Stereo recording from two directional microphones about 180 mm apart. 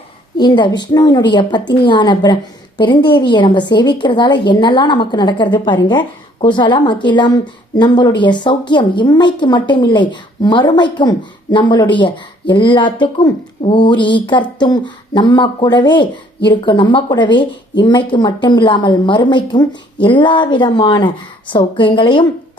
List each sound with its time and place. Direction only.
0.3 s a woman's voice: 25° left (ahead or behind)